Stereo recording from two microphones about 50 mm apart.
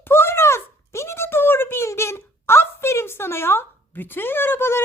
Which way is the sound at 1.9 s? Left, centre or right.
Left.